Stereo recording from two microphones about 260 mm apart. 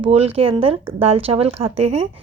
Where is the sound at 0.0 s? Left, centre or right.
Right.